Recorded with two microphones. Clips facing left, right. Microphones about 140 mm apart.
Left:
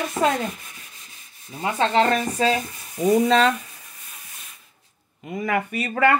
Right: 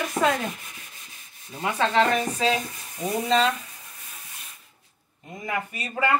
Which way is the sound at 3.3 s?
60° left (ahead or behind).